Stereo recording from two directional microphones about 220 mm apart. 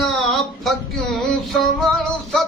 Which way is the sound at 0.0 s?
Centre (ahead or behind).